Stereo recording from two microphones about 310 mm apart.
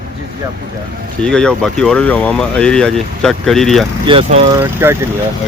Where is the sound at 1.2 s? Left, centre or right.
Centre.